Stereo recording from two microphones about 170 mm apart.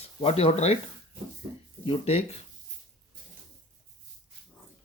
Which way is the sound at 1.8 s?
35° left (ahead or behind).